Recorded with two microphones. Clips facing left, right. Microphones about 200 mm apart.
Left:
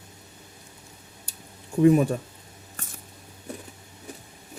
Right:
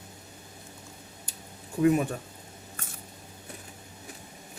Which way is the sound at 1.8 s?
35° left (ahead or behind).